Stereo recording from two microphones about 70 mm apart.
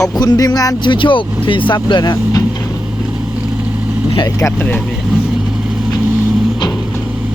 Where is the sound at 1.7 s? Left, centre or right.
Left.